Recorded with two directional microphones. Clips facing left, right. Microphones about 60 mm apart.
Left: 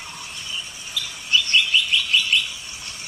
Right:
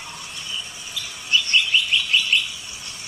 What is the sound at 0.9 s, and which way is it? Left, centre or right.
Chirp, right.